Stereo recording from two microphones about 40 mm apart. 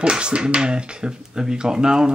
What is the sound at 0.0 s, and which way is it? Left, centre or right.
Speech, right.